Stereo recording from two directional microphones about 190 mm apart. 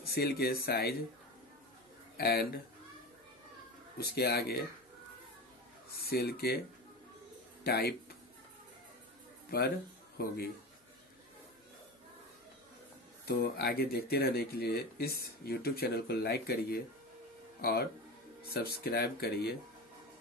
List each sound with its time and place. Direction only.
0.0 s speech: 55° left (ahead or behind)
2.1 s speech: 55° left (ahead or behind)
4.0 s speech: 55° left (ahead or behind)
5.9 s speech: 55° left (ahead or behind)
7.6 s speech: 55° left (ahead or behind)
10.1 s speech: 55° left (ahead or behind)
13.2 s speech: 60° left (ahead or behind)